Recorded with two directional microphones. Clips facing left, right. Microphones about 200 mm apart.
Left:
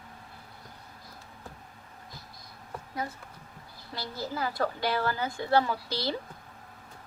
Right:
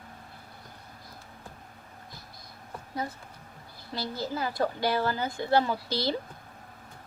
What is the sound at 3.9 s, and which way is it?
A woman's voice, 25° right (ahead or behind).